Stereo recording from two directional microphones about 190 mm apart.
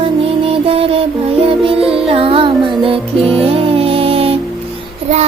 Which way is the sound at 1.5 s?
30° right (ahead or behind).